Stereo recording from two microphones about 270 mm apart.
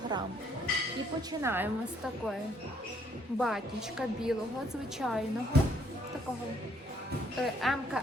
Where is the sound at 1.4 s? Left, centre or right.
Centre.